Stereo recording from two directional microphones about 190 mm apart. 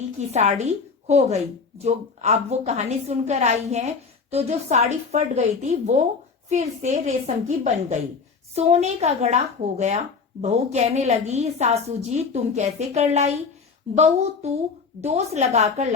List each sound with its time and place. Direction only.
0.2 s a woman's voice: 35° right (ahead or behind)